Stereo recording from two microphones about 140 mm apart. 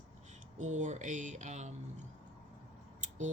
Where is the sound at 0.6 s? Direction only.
60° right (ahead or behind).